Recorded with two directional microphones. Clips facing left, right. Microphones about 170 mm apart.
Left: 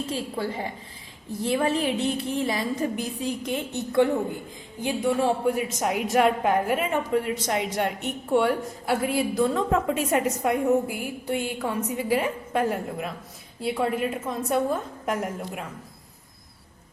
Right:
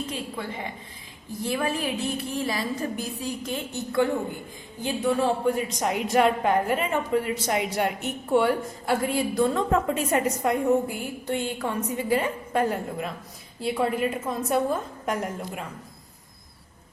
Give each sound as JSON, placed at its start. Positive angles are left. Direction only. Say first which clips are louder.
{"t": 0.0, "sound": "a woman's voice", "louder": "left 3 dB", "side_deg": 35}
{"t": 4.8, "sound": "a woman's voice", "louder": "even", "side_deg": 15}